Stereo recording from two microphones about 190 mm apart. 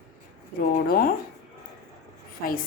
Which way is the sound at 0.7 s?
50° left (ahead or behind).